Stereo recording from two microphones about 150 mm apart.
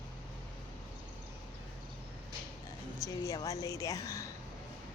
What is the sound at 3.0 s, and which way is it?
A woman's voice, 20° left (ahead or behind).